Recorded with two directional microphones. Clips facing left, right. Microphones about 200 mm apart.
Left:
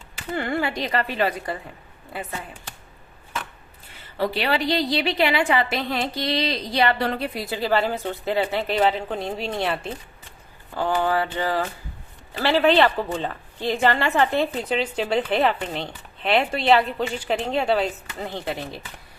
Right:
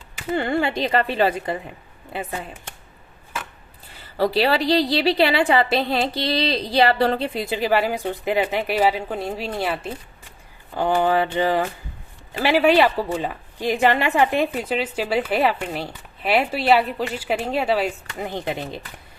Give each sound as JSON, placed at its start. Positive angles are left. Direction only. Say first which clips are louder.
{"t": 0.3, "sound": "a woman's voice", "louder": "right 3 dB", "side_deg": -25}
{"t": 4.2, "sound": "a woman's voice", "louder": "right 4 dB", "side_deg": -35}
{"t": 10.8, "sound": "a woman's voice", "louder": "right 3 dB", "side_deg": -20}